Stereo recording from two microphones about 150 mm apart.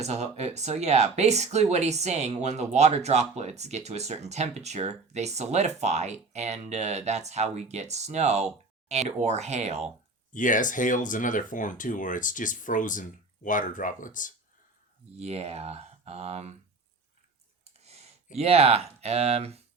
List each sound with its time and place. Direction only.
0.0 s speech: 50° right (ahead or behind)
10.3 s speech: 60° left (ahead or behind)
15.2 s speech: 45° right (ahead or behind)
18.3 s speech: 40° right (ahead or behind)